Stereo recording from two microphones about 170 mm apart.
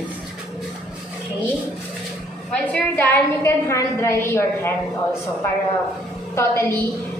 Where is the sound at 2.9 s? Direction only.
15° left (ahead or behind).